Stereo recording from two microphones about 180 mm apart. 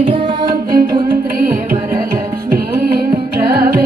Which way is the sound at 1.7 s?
55° right (ahead or behind).